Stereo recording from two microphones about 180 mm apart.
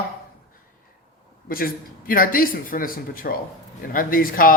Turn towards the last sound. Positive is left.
turn(degrees=50)  # may be behind; listen again after turning